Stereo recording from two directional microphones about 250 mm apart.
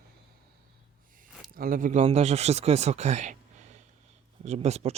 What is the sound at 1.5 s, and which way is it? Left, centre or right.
Speech, right.